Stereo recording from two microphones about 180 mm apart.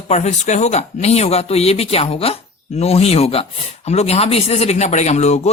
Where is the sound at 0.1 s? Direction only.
40° left (ahead or behind).